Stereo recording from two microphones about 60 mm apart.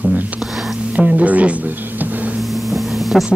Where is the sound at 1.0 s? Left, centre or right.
Right.